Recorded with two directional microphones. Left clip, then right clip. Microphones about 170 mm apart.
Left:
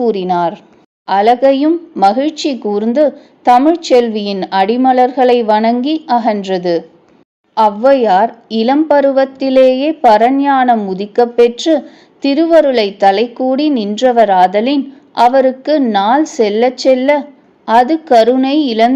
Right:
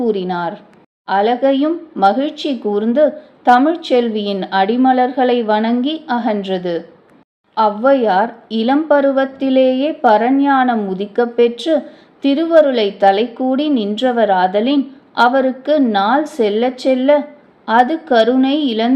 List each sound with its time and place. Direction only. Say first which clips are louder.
0.0 s speech: left 5 dB; 30° left (ahead or behind)